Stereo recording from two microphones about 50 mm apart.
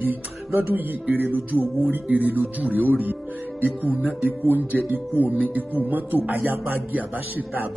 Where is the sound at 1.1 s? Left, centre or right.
Right.